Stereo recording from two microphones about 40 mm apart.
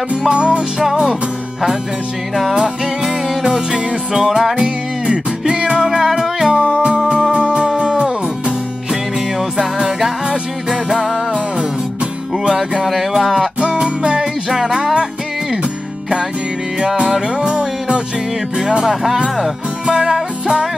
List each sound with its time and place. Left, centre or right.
0.3 s music: right
2.5 s music: right
6.4 s music: right; by 11.4 s centre
12.4 s music: centre
12.8 s a sound: centre
13.2 s music: centre
13.7 s music: centre
16.8 s music: centre
18.6 s speech: centre
19.9 s music: right